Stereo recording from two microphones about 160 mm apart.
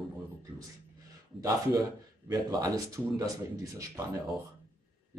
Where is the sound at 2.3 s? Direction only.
20° right (ahead or behind).